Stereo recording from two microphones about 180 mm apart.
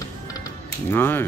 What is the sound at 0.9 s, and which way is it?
Speech, 10° left (ahead or behind).